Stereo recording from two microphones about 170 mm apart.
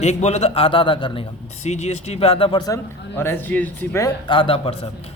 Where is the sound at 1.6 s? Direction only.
40° left (ahead or behind).